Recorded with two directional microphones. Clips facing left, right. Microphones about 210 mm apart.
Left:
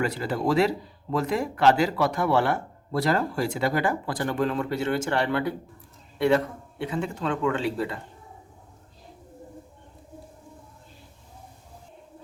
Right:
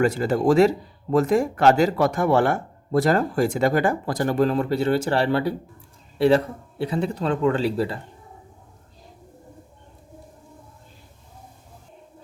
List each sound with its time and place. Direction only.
0.0 s a man's voice: 45° right (ahead or behind)